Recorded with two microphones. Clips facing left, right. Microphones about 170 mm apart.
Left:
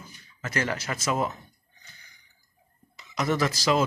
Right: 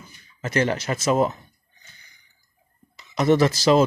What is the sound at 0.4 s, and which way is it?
Speech, 25° right (ahead or behind).